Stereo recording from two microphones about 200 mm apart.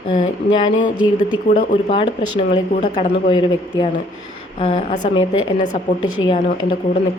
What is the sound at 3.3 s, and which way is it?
Speech, 20° left (ahead or behind).